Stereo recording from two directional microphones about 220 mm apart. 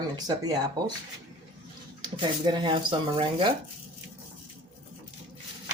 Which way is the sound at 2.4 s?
20° right (ahead or behind).